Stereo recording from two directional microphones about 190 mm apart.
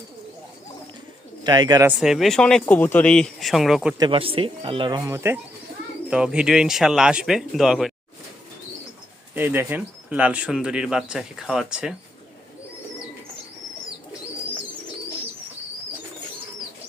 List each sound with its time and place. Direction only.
1.5 s speech: 20° right (ahead or behind)
2.0 s speech: centre (ahead or behind)
4.0 s speech: 30° right (ahead or behind); by 7.9 s centre (ahead or behind)
9.3 s speech: 10° right (ahead or behind)